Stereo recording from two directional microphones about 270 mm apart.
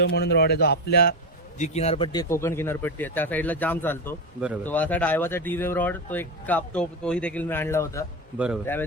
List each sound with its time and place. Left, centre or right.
0.0 s speech: left
1.5 s speech: left; by 8.8 s centre